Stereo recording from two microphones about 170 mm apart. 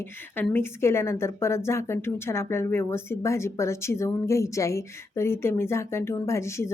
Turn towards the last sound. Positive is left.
turn(degrees=15)  # may be behind; listen again after turning